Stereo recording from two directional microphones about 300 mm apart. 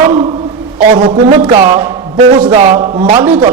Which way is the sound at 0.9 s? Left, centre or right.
Centre.